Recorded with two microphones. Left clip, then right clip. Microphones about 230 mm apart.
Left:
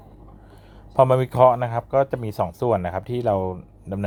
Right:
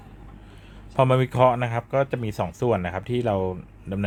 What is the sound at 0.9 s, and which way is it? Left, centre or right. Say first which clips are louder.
Speech: left 4 dB; centre.